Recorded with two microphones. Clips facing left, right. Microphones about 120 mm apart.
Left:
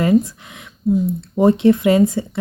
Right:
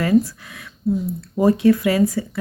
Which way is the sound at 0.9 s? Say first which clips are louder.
Left 4 dB; 15° left (ahead or behind).